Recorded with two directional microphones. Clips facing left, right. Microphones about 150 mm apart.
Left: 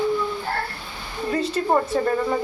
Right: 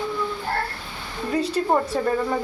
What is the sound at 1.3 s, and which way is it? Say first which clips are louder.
A woman's voice: even; centre (ahead or behind).